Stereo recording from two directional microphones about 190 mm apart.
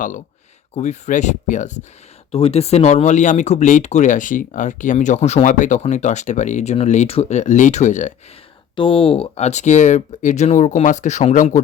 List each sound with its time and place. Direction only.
0.8 s speech: 40° left (ahead or behind)
8.7 s speech: 25° left (ahead or behind)